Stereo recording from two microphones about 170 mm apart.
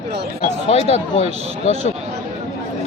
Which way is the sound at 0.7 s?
40° left (ahead or behind).